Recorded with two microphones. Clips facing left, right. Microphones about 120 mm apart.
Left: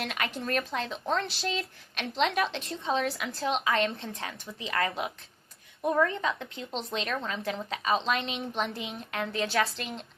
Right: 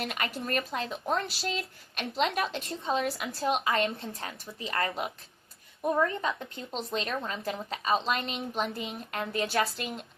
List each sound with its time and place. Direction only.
0.0 s speech: centre (ahead or behind)
6.2 s speech: centre (ahead or behind)